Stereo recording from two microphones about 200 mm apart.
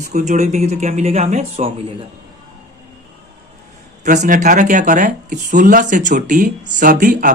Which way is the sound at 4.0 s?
40° right (ahead or behind).